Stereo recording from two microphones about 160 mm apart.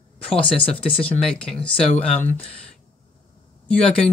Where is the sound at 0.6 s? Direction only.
35° left (ahead or behind).